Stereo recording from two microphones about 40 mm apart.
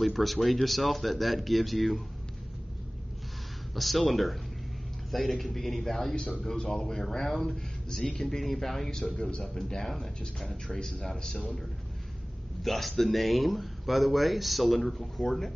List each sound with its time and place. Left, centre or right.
0.0 s speech: centre
3.7 s speech: centre
11.0 s speech: centre
12.6 s speech: centre